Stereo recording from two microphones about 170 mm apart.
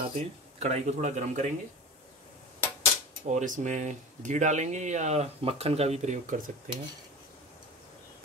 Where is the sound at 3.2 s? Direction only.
45° right (ahead or behind).